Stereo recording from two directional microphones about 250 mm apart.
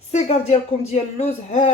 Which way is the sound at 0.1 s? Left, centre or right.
Left.